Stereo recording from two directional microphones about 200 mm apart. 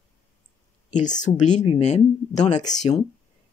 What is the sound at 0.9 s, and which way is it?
Speech, 40° left (ahead or behind).